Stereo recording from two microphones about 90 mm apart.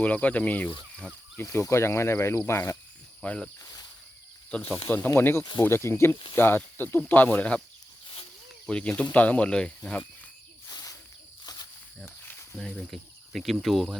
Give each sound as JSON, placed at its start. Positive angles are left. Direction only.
{"t": 0.0, "sound": "speech", "side_deg": 15}
{"t": 1.5, "sound": "speech", "side_deg": 35}
{"t": 3.2, "sound": "speech", "side_deg": 10}
{"t": 3.6, "sound": "a sound", "side_deg": 45}
{"t": 4.9, "sound": "speech", "side_deg": 25}
{"t": 8.6, "sound": "speech", "side_deg": 15}
{"t": 10.7, "sound": "cricket", "side_deg": 40}
{"t": 12.0, "sound": "cricket", "side_deg": 25}
{"t": 12.7, "sound": "speech", "side_deg": 0}